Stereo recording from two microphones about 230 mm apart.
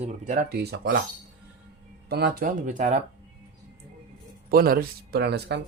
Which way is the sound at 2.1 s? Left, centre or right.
Right.